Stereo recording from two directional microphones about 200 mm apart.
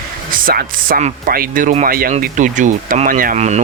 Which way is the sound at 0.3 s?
45° right (ahead or behind).